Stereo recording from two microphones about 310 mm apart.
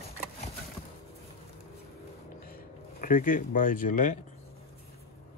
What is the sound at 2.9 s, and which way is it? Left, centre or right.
Speech, left.